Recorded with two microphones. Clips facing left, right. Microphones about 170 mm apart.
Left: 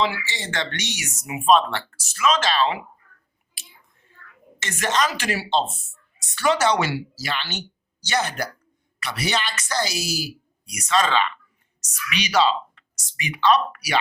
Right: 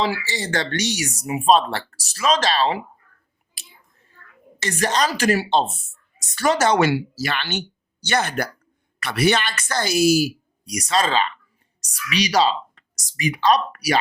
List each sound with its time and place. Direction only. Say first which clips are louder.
0.0 s speech: right 1 dB; 35° right (ahead or behind)
3.5 s a sound: right 1 dB; 35° right (ahead or behind)
4.6 s speech: right 2 dB; 35° right (ahead or behind); by 5.7 s 55° right (ahead or behind)
6.1 s a woman's voice: right 1 dB; 40° right (ahead or behind)